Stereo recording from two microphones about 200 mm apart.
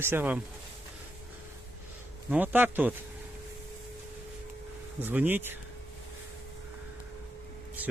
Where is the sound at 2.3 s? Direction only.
10° right (ahead or behind).